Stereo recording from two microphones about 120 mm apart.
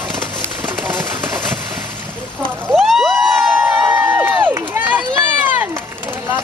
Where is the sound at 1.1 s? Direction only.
20° right (ahead or behind).